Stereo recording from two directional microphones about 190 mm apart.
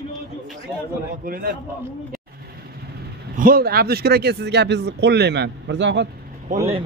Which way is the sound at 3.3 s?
50° right (ahead or behind).